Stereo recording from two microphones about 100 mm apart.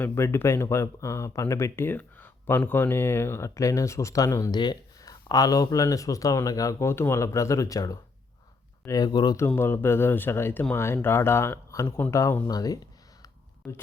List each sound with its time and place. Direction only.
0.0 s speech: 25° left (ahead or behind)
4.5 s speech: 45° left (ahead or behind)
9.6 s speech: 25° left (ahead or behind); by 12.8 s 40° left (ahead or behind)
13.2 s a sound: 30° left (ahead or behind)